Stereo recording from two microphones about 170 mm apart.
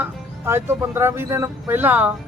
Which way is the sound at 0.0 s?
15° right (ahead or behind).